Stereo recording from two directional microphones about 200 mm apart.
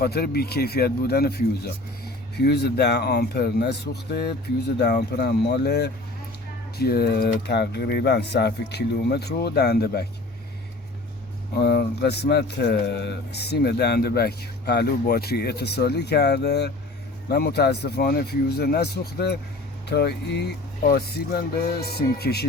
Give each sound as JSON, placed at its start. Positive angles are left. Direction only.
{"t": 0.0, "sound": "speech", "side_deg": 50}
{"t": 11.5, "sound": "speech", "side_deg": 50}